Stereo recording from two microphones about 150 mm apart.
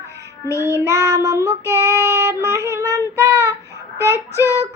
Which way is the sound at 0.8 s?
20° right (ahead or behind).